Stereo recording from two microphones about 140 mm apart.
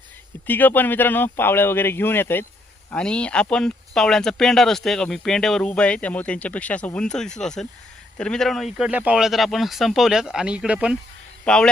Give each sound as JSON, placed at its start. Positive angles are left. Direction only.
{"t": 0.4, "sound": "speech", "side_deg": 15}
{"t": 11.4, "sound": "speech", "side_deg": 5}